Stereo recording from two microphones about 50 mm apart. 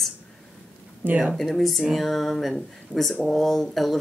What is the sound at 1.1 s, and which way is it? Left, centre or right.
Speech, right.